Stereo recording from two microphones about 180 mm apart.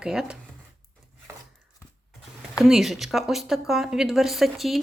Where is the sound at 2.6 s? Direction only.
Centre (ahead or behind).